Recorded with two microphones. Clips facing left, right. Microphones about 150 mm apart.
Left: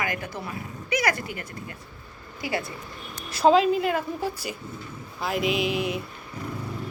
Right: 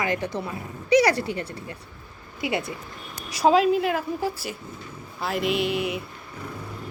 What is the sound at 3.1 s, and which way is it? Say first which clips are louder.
Speech: even; 5° right (ahead or behind).